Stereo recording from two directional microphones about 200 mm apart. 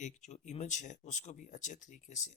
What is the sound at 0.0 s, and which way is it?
Speech, 35° left (ahead or behind).